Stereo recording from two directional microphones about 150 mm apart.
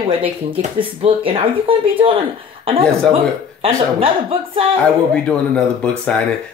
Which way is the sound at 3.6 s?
35° right (ahead or behind).